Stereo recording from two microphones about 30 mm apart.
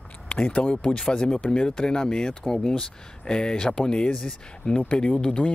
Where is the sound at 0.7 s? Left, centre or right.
Left.